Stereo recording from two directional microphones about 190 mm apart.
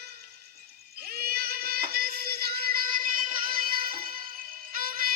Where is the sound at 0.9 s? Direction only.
55° right (ahead or behind).